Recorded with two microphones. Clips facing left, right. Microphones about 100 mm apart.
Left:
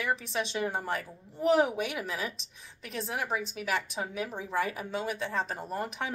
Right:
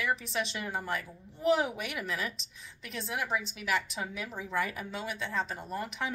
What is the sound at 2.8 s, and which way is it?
A woman's voice, 40° left (ahead or behind).